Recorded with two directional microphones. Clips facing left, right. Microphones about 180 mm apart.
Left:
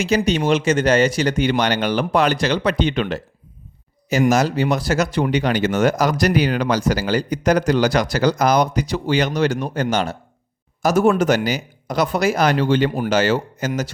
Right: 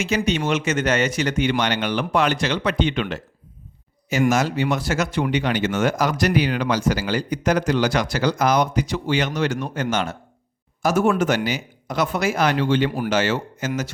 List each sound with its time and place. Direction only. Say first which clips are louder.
0.3 s speech: left 4 dB; 35° left (ahead or behind)
4.3 s speech: left 3 dB; 35° left (ahead or behind)